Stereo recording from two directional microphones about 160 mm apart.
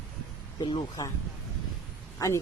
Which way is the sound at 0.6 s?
30° left (ahead or behind).